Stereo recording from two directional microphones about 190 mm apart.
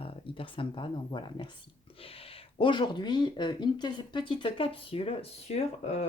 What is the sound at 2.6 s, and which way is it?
Speech, 25° left (ahead or behind).